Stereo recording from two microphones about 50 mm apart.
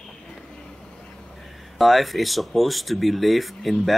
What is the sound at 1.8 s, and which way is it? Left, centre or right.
Speech, centre.